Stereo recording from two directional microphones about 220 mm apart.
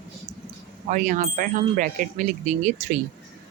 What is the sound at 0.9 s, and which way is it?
Speech, 35° right (ahead or behind).